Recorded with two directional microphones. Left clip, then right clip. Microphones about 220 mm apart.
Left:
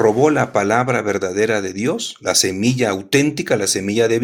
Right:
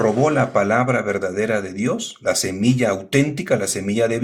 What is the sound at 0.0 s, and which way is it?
Speech, 30° left (ahead or behind).